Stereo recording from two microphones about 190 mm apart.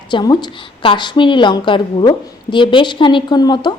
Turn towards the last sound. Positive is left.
turn(degrees=20)  # may be behind; listen again after turning